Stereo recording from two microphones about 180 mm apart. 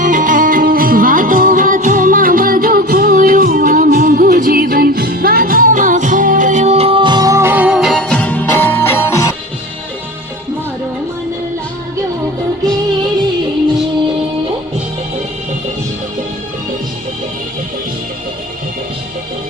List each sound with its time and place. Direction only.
0.0 s music: 45° right (ahead or behind); by 9.3 s 15° left (ahead or behind)